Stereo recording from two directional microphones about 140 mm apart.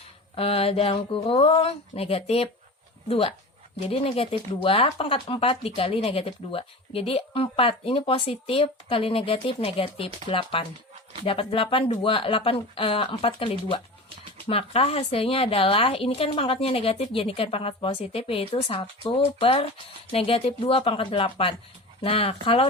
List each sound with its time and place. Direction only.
0.3 s speech: 45° left (ahead or behind)